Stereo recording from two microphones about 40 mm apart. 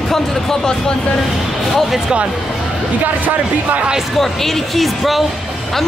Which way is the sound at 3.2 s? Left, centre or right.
Right.